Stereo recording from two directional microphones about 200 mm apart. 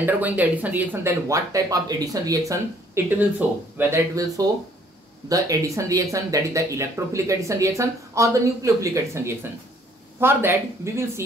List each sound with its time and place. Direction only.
0.0 s speech: 10° right (ahead or behind)